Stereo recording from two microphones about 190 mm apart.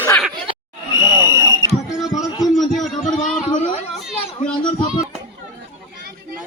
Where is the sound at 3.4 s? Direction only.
35° left (ahead or behind).